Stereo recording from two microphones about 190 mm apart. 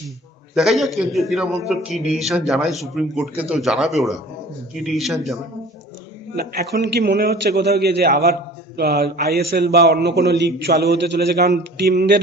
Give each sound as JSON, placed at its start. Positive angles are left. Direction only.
{"t": 0.5, "sound": "a man's voice", "side_deg": 0}
{"t": 6.3, "sound": "a man's voice", "side_deg": -55}